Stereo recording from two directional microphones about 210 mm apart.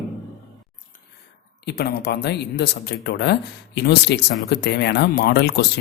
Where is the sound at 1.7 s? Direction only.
50° left (ahead or behind).